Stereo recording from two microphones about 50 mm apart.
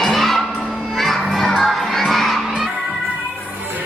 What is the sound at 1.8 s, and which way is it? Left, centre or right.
Crowd, centre.